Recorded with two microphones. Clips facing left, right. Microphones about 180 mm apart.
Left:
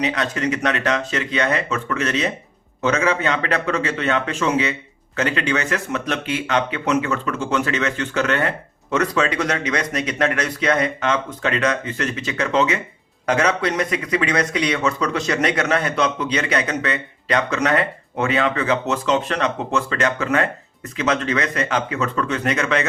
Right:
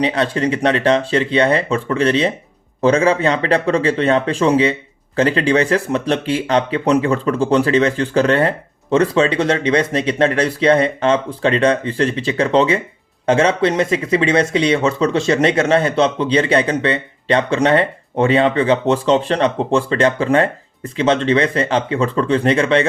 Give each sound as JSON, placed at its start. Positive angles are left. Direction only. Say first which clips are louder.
{"t": 0.0, "sound": "speech", "louder": "right 5 dB", "side_deg": -30}